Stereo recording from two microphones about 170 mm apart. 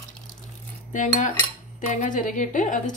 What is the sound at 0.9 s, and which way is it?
A woman's voice, 50° left (ahead or behind).